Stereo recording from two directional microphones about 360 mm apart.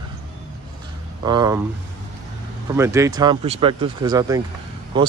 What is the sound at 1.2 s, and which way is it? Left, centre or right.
Speech, centre.